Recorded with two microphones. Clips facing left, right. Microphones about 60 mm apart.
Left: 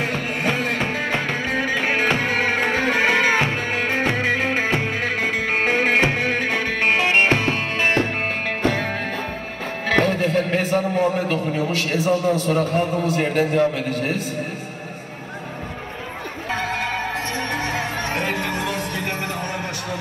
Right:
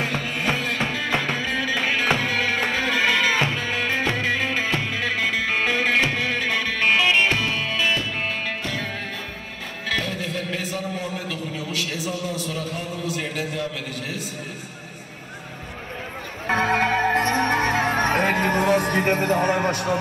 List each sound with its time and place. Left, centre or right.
0.0 s music: left
16.4 s music: right